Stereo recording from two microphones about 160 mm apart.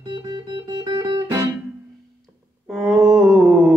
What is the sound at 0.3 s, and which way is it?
Music, 25° right (ahead or behind).